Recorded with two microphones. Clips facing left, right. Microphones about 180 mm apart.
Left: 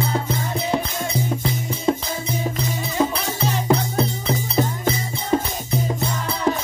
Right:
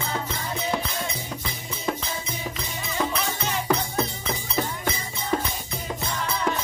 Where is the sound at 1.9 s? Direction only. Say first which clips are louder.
Left 8 dB; 25° left (ahead or behind).